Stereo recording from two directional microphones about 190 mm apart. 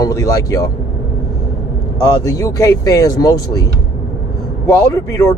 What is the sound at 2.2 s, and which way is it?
Speech, 20° left (ahead or behind).